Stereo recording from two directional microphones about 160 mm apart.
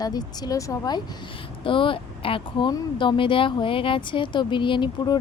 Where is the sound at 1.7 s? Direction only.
30° left (ahead or behind).